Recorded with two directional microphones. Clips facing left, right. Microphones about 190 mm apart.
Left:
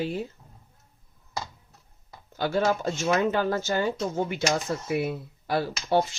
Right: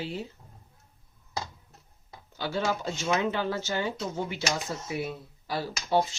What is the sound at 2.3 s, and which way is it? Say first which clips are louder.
Speech: left 5 dB; 50° left (ahead or behind).